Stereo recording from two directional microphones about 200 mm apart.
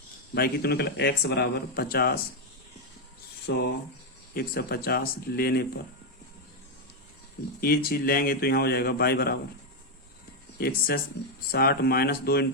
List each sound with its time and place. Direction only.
0.3 s a man's voice: 50° left (ahead or behind)
3.5 s speech: 60° left (ahead or behind)
4.4 s a man's voice: 50° left (ahead or behind)
7.6 s a man's voice: 50° left (ahead or behind)
10.6 s a man's voice: 50° left (ahead or behind)